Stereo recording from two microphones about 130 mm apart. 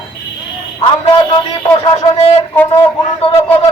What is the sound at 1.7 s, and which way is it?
Speech, 45° left (ahead or behind).